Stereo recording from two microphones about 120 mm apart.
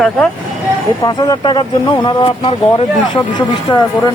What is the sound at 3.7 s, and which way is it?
Speech, 40° left (ahead or behind).